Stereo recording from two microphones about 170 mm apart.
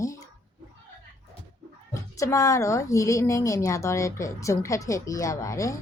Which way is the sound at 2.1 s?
20° left (ahead or behind).